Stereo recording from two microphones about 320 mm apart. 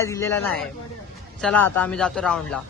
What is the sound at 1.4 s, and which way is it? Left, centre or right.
A man's voice, centre.